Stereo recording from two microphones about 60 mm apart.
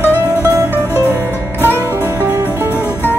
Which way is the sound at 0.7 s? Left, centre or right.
Right.